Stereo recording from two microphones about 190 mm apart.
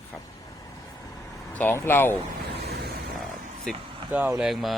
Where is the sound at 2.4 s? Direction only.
60° right (ahead or behind).